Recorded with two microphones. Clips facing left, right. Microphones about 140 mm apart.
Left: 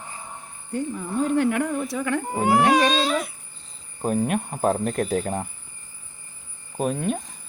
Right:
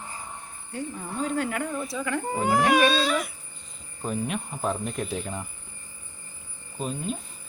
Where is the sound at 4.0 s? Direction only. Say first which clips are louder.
Left 6 dB; 50° left (ahead or behind).